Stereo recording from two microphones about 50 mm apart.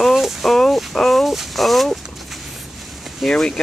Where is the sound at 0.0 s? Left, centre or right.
Centre.